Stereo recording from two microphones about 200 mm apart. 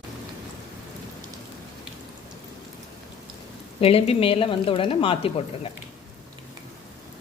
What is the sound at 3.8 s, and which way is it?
Speech, 30° left (ahead or behind).